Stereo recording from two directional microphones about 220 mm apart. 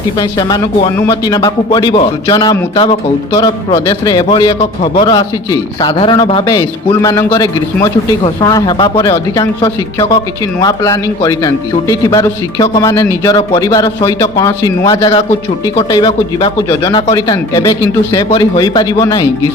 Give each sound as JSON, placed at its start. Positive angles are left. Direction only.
{"t": 0.2, "sound": "a man's voice", "side_deg": 20}